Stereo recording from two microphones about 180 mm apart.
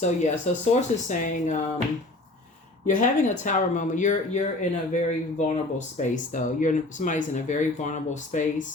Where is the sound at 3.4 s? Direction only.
45° left (ahead or behind).